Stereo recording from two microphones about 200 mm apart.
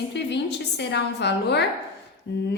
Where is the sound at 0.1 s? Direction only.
60° left (ahead or behind).